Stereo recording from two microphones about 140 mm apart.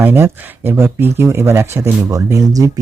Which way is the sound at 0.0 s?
15° right (ahead or behind).